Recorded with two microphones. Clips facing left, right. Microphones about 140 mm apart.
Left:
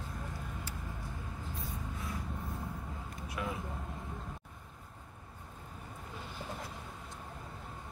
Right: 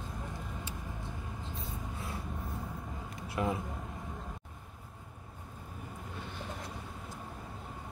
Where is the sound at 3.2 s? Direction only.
30° right (ahead or behind).